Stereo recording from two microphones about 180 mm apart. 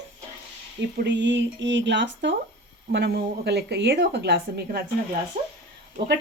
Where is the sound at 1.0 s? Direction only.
75° right (ahead or behind).